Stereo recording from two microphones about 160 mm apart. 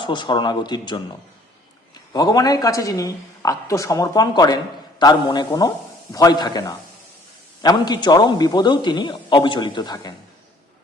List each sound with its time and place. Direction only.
0.0 s speech: 30° left (ahead or behind)
2.1 s speech: 25° left (ahead or behind)